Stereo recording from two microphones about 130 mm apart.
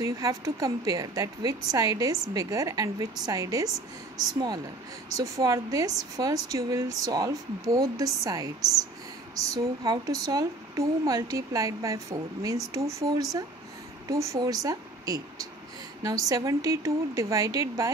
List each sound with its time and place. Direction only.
0.0 s speech: 25° right (ahead or behind)
5.1 s speech: 25° right (ahead or behind)
9.5 s a woman's voice: 25° right (ahead or behind)